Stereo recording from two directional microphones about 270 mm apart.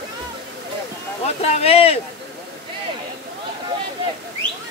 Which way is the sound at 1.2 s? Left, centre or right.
Left.